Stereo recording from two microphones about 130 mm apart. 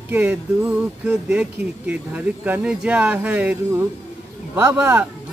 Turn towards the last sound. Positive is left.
turn(degrees=-15)  # may be behind; listen again after turning